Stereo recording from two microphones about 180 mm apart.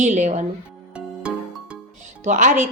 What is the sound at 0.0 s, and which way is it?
Speech, 40° right (ahead or behind).